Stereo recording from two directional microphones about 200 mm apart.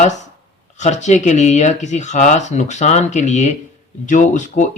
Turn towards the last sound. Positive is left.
turn(degrees=40)  # may be behind; listen again after turning